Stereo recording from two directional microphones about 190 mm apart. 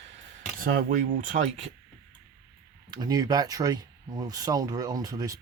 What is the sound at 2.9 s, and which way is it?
Speech, 20° right (ahead or behind).